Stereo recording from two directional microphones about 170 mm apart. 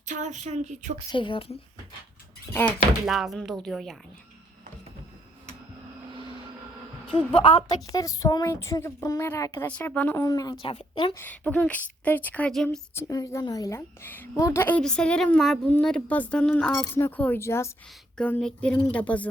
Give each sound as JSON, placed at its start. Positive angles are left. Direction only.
{"t": 0.0, "sound": "speech", "side_deg": -45}
{"t": 1.1, "sound": "speech", "side_deg": 30}
{"t": 2.5, "sound": "a woman's voice", "side_deg": 10}
{"t": 3.1, "sound": "speech", "side_deg": 0}
{"t": 6.1, "sound": "vehicle", "side_deg": -30}
{"t": 7.3, "sound": "speech", "side_deg": 30}
{"t": 7.9, "sound": "a woman's voice", "side_deg": 20}
{"t": 10.6, "sound": "speech", "side_deg": 35}
{"t": 11.2, "sound": "a woman's voice", "side_deg": 10}
{"t": 13.0, "sound": "a woman's voice", "side_deg": 20}